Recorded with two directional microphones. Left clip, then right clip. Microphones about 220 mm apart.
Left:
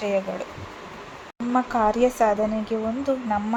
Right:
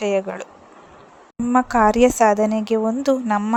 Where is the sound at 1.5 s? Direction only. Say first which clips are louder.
Right 5 dB; 45° right (ahead or behind).